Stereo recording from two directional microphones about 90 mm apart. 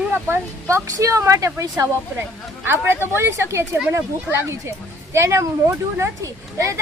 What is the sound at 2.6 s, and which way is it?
Speech, 25° right (ahead or behind).